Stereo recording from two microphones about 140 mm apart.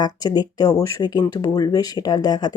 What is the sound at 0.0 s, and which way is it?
Speech, 30° left (ahead or behind).